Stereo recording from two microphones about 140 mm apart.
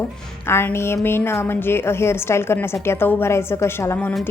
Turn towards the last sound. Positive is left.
turn(degrees=15)  # may be behind; listen again after turning